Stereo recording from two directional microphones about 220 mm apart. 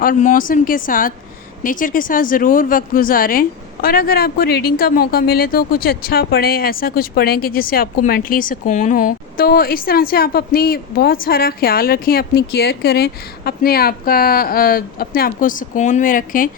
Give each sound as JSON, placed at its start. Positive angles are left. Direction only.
{"t": 0.0, "sound": "speech", "side_deg": 40}